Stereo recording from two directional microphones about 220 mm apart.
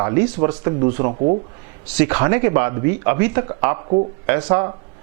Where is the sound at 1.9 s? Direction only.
15° right (ahead or behind).